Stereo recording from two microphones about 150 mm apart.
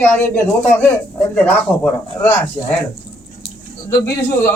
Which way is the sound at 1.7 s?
Centre (ahead or behind).